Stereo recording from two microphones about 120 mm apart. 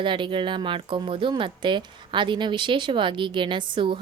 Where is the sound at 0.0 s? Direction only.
45° right (ahead or behind).